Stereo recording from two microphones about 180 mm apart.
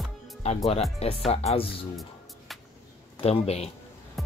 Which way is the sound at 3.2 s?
35° left (ahead or behind).